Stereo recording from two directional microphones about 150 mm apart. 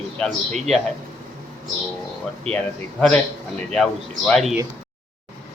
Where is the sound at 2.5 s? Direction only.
40° right (ahead or behind).